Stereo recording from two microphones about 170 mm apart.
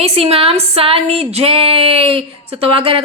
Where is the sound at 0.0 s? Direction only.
35° right (ahead or behind).